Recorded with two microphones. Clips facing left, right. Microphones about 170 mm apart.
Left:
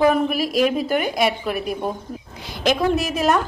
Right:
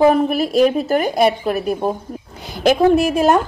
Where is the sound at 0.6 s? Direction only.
40° right (ahead or behind).